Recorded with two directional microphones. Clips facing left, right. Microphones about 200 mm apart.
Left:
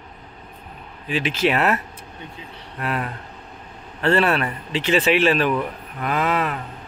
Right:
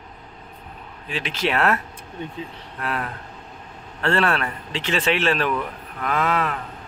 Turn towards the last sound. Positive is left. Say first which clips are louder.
# left 1 dB
turn(degrees=5)  # may be behind; listen again after turning